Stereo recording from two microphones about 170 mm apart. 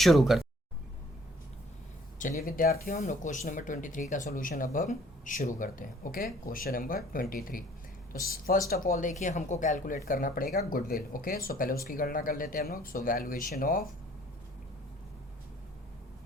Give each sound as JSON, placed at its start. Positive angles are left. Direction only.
{"t": 0.0, "sound": "speech", "side_deg": 0}
{"t": 2.1, "sound": "speech", "side_deg": 50}